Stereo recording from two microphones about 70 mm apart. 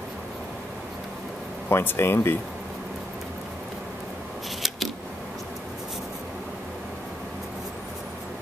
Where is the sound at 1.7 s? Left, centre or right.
Left.